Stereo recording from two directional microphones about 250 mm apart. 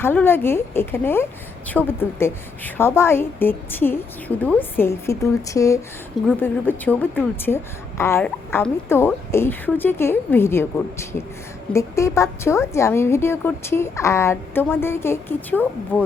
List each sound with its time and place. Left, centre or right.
0.0 s a woman's voice: centre